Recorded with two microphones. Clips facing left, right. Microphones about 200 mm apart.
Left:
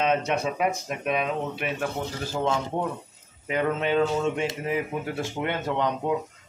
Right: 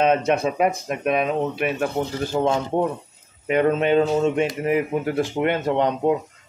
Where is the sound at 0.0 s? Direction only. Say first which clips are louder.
Right 5 dB; 55° right (ahead or behind).